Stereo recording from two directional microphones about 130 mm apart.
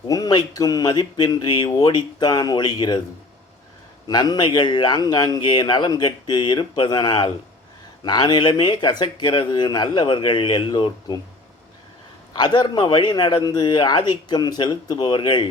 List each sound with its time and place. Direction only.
0.1 s speech: 30° left (ahead or behind)
4.1 s speech: 30° left (ahead or behind)
12.3 s speech: 35° left (ahead or behind)